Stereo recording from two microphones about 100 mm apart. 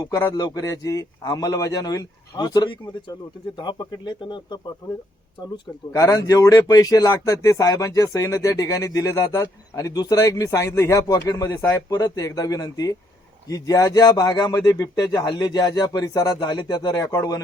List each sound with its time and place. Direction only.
0.1 s speech: 30° left (ahead or behind); by 4.6 s 50° left (ahead or behind)
5.9 s speech: 35° left (ahead or behind)